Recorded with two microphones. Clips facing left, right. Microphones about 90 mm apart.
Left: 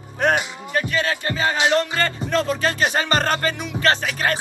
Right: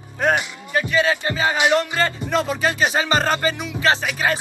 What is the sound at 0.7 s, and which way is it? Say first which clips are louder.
Speech: right 3 dB; 15° right (ahead or behind).